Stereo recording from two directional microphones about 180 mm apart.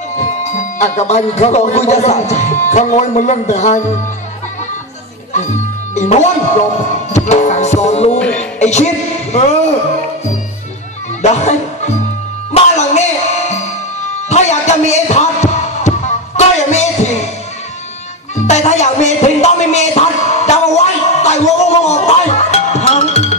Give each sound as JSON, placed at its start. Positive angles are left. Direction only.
{"t": 0.2, "sound": "speech", "side_deg": 40}
{"t": 5.9, "sound": "speech", "side_deg": 40}
{"t": 8.2, "sound": "music", "side_deg": 5}
{"t": 8.5, "sound": "speech", "side_deg": 40}
{"t": 11.2, "sound": "speech", "side_deg": 40}
{"t": 12.5, "sound": "music", "side_deg": 40}
{"t": 18.5, "sound": "music", "side_deg": 40}